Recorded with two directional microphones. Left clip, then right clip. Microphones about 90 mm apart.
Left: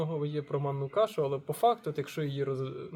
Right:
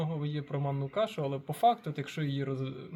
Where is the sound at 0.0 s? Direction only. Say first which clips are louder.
Left 4 dB; 25° left (ahead or behind).